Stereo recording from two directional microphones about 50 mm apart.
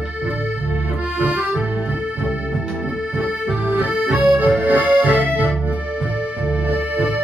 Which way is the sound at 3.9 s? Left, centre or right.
Right.